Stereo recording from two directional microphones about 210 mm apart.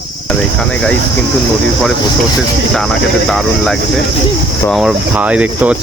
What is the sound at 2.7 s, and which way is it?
Speech, centre (ahead or behind).